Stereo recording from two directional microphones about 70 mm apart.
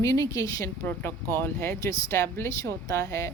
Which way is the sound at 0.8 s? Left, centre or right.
Left.